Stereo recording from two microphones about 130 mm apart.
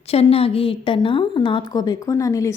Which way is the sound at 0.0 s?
50° left (ahead or behind).